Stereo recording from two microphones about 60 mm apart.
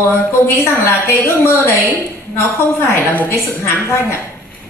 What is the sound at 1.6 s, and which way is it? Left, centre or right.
A woman's voice, left.